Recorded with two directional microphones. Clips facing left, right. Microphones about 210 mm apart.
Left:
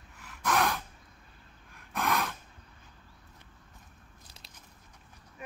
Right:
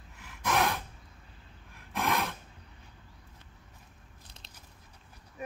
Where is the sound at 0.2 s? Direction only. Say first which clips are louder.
Even; centre (ahead or behind).